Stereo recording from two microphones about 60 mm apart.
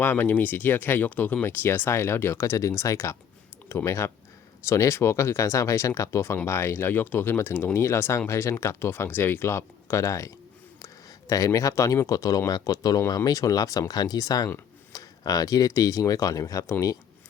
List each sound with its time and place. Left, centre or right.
0.0 s speech: left
3.7 s speech: left